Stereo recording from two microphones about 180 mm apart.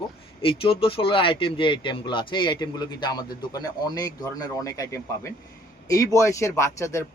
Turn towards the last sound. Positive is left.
turn(degrees=15)  # may be behind; listen again after turning